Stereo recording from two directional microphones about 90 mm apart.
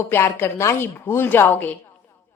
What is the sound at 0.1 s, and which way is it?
A woman's voice, 25° left (ahead or behind).